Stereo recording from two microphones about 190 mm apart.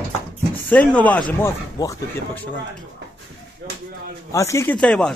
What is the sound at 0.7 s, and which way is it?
Speech, 5° left (ahead or behind).